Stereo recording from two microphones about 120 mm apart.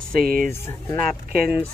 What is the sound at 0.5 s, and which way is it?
Speech, 20° left (ahead or behind).